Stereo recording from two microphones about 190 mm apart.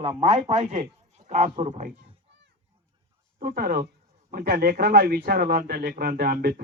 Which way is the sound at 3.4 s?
50° right (ahead or behind).